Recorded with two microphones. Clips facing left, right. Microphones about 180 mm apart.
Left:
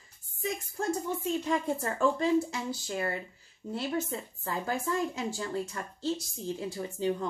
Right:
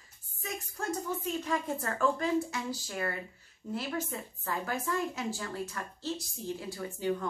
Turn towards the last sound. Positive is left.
turn(degrees=25)  # may be behind; listen again after turning